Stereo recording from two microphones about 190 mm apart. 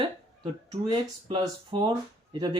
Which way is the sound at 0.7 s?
25° right (ahead or behind).